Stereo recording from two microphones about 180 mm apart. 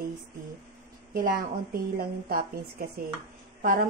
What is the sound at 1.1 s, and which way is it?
A woman's voice, 50° right (ahead or behind).